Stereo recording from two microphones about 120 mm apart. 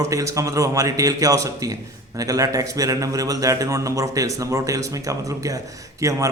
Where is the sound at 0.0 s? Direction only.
25° right (ahead or behind).